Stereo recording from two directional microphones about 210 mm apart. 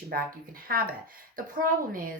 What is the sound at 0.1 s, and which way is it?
A woman's voice, 45° right (ahead or behind).